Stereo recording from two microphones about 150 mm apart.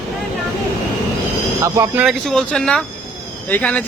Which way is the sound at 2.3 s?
5° left (ahead or behind).